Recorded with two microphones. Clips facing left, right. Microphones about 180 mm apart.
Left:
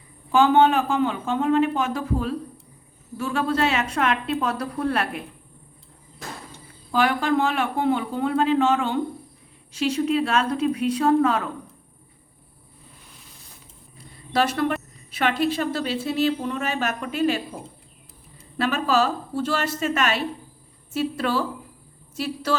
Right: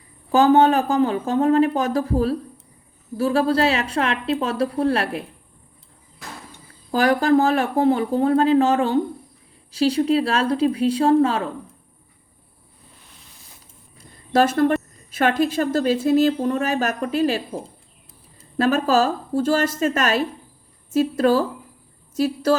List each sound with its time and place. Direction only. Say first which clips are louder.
0.3 s speech: right 3 dB; 40° right (ahead or behind)
6.9 s speech: right 4 dB; 40° right (ahead or behind)
14.3 s a woman's voice: right 5 dB; 45° right (ahead or behind)